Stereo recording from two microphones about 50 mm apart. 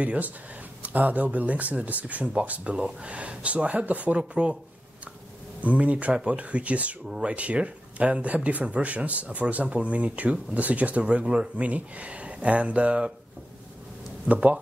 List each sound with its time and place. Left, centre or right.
0.0 s speech: right
5.6 s speech: right
14.2 s speech: right